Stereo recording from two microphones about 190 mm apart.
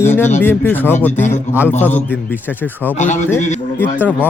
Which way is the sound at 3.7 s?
10° left (ahead or behind).